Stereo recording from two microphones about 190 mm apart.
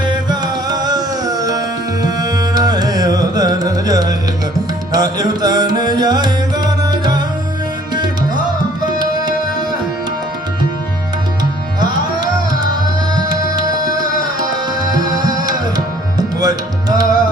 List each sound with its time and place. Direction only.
0.0 s music: 20° right (ahead or behind)
11.8 s tabla: 20° right (ahead or behind)
13.6 s music: 20° right (ahead or behind)
14.9 s music: 20° right (ahead or behind)